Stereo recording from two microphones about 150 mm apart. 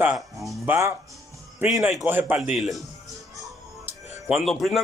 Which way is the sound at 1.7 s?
Centre (ahead or behind).